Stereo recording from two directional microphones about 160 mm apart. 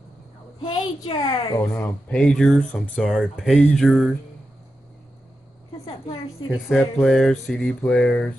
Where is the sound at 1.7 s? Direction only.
10° left (ahead or behind).